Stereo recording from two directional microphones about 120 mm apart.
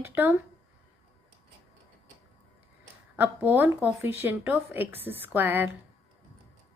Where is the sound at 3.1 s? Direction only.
15° right (ahead or behind).